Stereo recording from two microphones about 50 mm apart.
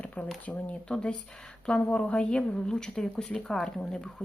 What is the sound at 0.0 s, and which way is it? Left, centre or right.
Shuffling cards, left.